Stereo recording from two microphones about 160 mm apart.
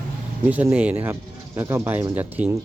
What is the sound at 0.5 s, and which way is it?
Speech, 10° right (ahead or behind).